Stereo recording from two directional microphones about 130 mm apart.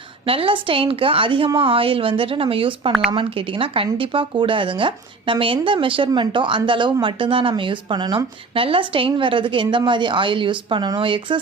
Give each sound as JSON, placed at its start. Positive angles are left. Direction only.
{"t": 0.3, "sound": "speech", "side_deg": -45}